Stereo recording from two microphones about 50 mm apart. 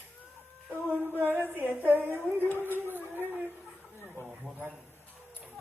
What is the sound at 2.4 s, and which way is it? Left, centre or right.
Speech, left.